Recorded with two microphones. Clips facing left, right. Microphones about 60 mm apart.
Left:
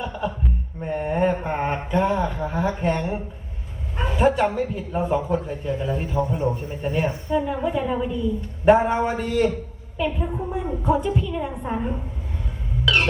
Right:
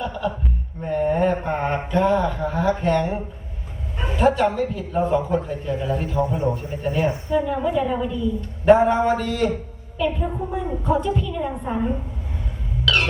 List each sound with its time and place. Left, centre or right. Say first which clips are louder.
0.0 s chuckle: right 1 dB; centre
0.8 s mantra: right 3 dB; centre
4.2 s a man's voice: right 1 dB; centre
6.8 s a man's voice: right 2 dB; centre
8.6 s a man's voice: right 2 dB; centre
12.8 s cough: even; centre